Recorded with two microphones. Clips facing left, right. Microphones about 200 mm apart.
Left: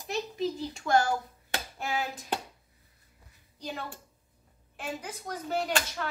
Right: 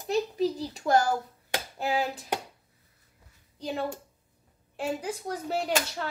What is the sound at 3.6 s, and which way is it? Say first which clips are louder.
Speech: right 7 dB; 30° right (ahead or behind).